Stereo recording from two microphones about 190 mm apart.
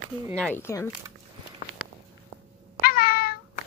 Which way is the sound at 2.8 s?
50° left (ahead or behind).